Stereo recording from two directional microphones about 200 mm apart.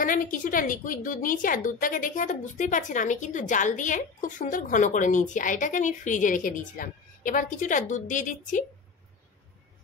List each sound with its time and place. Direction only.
0.0 s a woman's voice: 45° left (ahead or behind)